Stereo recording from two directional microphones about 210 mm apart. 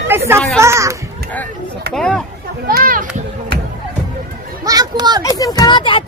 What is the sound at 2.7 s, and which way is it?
Speech, 45° right (ahead or behind).